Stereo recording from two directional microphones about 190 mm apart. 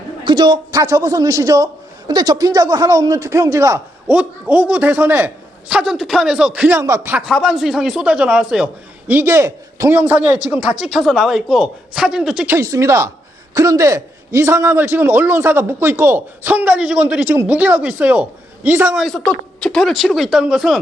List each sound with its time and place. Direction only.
0.3 s a man's voice: 25° right (ahead or behind)
7.2 s speech: centre (ahead or behind)
12.5 s a man's voice: 15° right (ahead or behind); by 20.8 s centre (ahead or behind)